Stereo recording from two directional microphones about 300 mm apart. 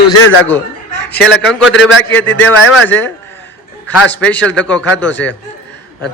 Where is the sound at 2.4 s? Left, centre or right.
Centre.